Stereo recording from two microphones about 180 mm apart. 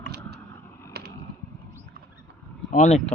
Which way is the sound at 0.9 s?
65° right (ahead or behind).